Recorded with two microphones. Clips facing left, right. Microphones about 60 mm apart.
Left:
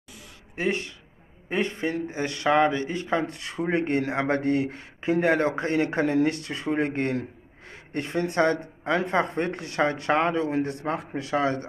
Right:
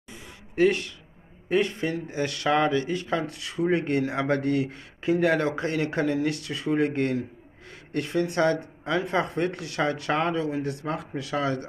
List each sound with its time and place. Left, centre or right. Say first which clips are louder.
0.6 s speech: right 5 dB; left